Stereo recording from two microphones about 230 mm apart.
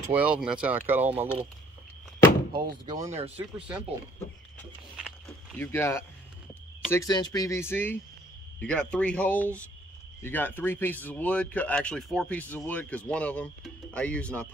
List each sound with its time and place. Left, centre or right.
0.1 s speech: centre
2.5 s speech: centre
3.2 s speech: right
5.6 s speech: centre